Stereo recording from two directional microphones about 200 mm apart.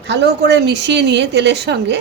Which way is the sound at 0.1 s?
55° right (ahead or behind).